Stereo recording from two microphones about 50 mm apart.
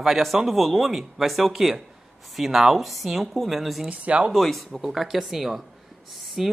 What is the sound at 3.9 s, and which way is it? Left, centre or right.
Speech, right.